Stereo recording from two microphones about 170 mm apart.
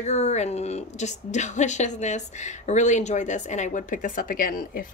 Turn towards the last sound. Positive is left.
turn(degrees=55)  # may be behind; listen again after turning